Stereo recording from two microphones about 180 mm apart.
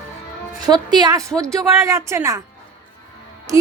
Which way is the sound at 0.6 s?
20° right (ahead or behind).